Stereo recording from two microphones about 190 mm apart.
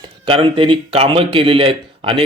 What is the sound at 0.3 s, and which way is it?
Speech, 25° right (ahead or behind).